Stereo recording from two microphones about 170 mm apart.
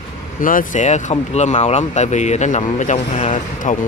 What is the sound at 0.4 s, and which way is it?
Speech, 55° left (ahead or behind).